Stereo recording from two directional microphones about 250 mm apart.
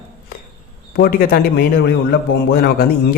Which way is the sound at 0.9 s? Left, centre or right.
Left.